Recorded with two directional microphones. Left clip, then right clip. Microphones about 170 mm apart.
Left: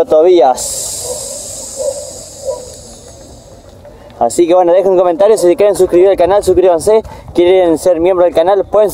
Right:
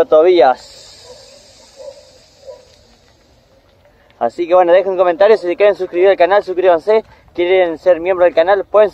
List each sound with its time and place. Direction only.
0.0 s speech: 15° left (ahead or behind)
4.2 s speech: 20° left (ahead or behind)